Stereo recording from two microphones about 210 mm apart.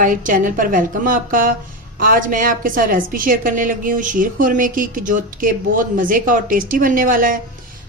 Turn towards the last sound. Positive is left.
turn(degrees=-40)  # may be behind; listen again after turning